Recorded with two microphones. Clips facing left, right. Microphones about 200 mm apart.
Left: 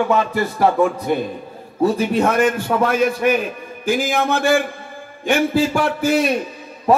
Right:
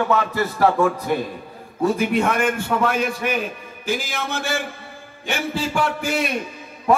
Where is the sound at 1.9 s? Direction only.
40° left (ahead or behind).